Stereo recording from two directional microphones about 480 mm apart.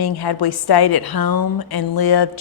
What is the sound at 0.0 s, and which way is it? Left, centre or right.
A woman's voice, left.